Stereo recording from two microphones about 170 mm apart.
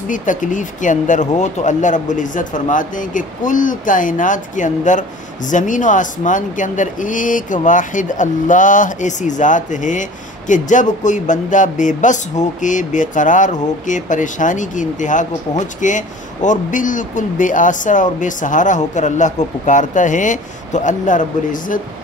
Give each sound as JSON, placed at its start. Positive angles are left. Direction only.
{"t": 0.1, "sound": "speech", "side_deg": 50}